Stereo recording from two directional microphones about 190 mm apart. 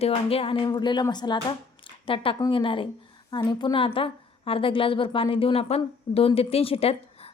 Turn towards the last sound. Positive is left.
turn(degrees=30)  # may be behind; listen again after turning